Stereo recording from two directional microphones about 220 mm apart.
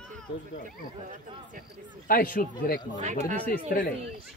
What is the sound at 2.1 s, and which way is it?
Speech, 40° left (ahead or behind).